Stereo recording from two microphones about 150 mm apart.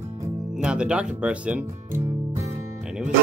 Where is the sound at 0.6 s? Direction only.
5° right (ahead or behind).